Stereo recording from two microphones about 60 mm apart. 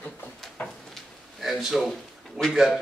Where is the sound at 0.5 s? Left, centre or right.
Centre.